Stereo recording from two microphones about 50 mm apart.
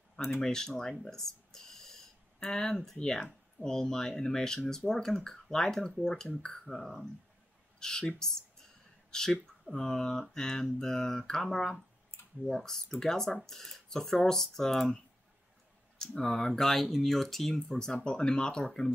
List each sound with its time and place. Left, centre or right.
0.4 s speech: centre
1.0 s a sound: centre
3.6 s a woman's voice: centre
9.1 s speech: centre
16.2 s speech: centre
17.6 s speech: centre